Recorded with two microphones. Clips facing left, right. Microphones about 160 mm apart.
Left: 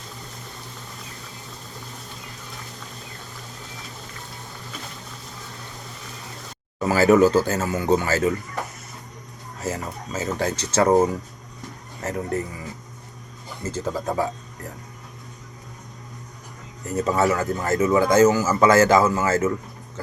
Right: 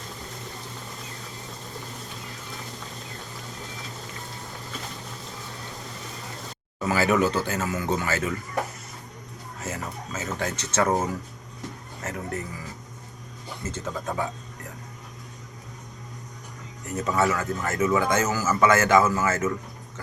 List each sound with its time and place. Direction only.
6.8 s a man's voice: 40° left (ahead or behind)
9.6 s a man's voice: 35° left (ahead or behind)
13.7 s a man's voice: 35° left (ahead or behind)
17.0 s a man's voice: 35° left (ahead or behind)